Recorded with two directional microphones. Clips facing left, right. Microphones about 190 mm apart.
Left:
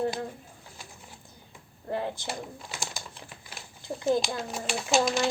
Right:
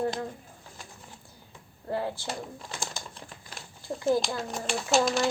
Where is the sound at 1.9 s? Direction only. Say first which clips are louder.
Even; 20° left (ahead or behind).